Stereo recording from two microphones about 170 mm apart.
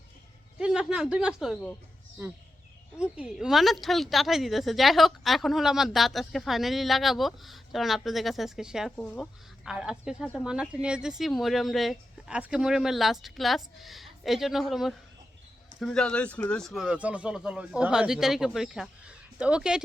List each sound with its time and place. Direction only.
0.6 s a woman's voice: 5° right (ahead or behind)
3.0 s a woman's voice: 5° right (ahead or behind)
9.0 s speech: 10° left (ahead or behind)
9.7 s a woman's voice: 5° right (ahead or behind)